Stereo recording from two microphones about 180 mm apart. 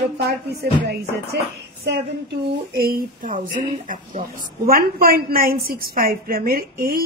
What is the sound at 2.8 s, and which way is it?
Speech, 55° right (ahead or behind).